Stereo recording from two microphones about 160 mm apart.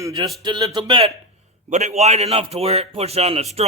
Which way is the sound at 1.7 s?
45° right (ahead or behind).